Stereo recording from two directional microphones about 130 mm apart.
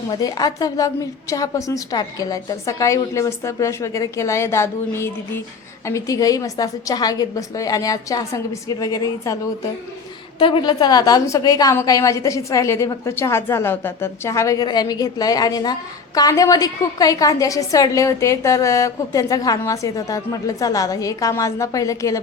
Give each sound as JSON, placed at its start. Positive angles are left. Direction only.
{"t": 0.1, "sound": "a woman's voice", "side_deg": 30}
{"t": 10.3, "sound": "a woman's voice", "side_deg": 40}